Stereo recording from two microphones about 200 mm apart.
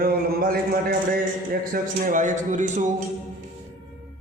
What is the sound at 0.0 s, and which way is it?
A man's voice, 50° right (ahead or behind).